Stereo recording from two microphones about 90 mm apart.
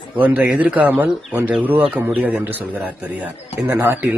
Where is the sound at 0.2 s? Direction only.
20° right (ahead or behind).